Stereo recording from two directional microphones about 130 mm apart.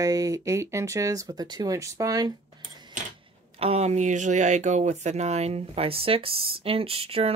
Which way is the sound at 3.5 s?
50° right (ahead or behind).